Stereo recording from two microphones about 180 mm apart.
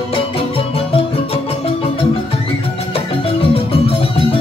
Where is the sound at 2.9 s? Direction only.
30° left (ahead or behind).